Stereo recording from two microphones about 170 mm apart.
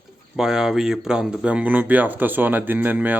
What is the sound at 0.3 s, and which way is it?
Speech, 5° right (ahead or behind).